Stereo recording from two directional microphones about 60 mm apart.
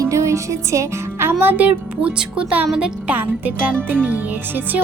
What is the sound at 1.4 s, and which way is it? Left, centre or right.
Speech, right.